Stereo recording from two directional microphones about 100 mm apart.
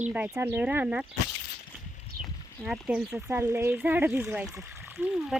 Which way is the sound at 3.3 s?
25° right (ahead or behind).